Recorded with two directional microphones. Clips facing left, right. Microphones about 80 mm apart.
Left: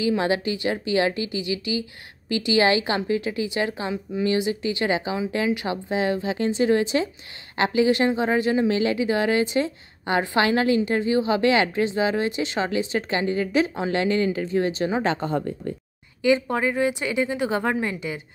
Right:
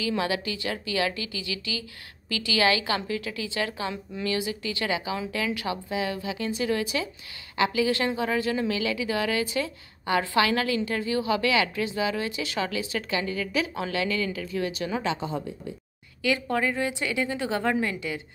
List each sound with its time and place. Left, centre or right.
0.2 s a woman's voice: left
15.0 s speech: left
16.2 s a woman's voice: left